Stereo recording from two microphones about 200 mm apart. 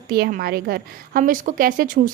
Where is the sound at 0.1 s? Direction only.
50° right (ahead or behind).